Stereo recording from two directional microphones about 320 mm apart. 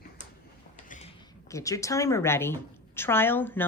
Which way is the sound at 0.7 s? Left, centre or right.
Left.